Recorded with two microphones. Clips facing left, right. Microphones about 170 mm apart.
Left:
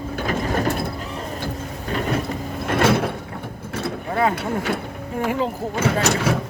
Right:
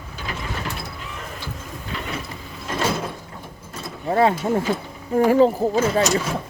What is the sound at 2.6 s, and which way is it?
Sliding door, 70° left (ahead or behind).